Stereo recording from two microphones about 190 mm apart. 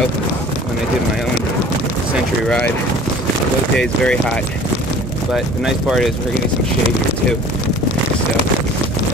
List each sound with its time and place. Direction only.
2.4 s speech: 5° left (ahead or behind)
3.7 s speech: 5° left (ahead or behind)
5.9 s speech: centre (ahead or behind)